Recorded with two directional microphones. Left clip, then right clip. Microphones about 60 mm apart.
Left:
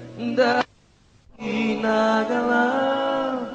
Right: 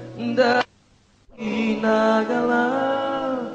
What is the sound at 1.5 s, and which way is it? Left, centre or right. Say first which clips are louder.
Mantra: right 1 dB; centre.